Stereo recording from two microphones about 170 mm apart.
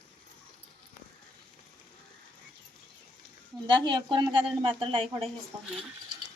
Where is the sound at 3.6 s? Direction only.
25° right (ahead or behind).